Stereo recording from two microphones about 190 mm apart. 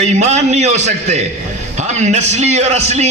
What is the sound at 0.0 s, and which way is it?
A man's voice, 35° right (ahead or behind).